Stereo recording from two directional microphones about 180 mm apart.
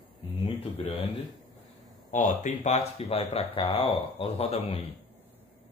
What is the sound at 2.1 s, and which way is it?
Speech, 45° left (ahead or behind).